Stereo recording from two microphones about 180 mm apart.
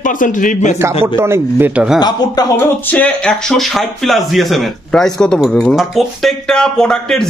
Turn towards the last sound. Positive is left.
turn(degrees=5)  # may be behind; listen again after turning